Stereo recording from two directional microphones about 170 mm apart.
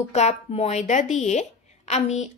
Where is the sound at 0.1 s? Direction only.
40° left (ahead or behind).